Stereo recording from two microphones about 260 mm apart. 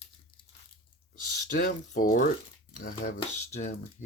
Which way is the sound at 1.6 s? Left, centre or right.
Left.